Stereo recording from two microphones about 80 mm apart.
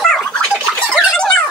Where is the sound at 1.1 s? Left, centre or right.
Centre.